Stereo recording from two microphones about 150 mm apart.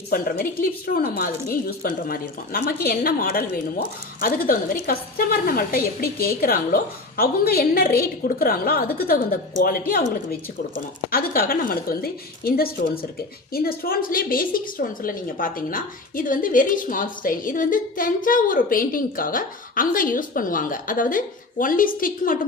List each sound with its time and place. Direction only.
0.1 s a woman's voice: 75° left (ahead or behind)